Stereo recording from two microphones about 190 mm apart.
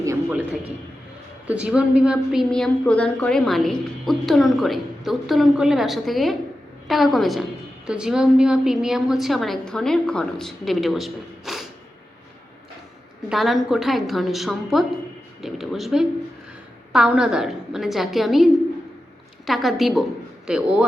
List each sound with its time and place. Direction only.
0.0 s a sound: 15° right (ahead or behind)
1.5 s a woman's voice: 5° right (ahead or behind)
13.2 s a woman's voice: centre (ahead or behind)